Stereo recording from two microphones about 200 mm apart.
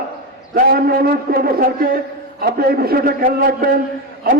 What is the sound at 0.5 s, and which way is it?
A man's voice, 50° right (ahead or behind).